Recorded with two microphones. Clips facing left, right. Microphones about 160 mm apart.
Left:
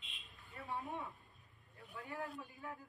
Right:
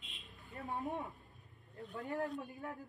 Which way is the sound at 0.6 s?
40° right (ahead or behind).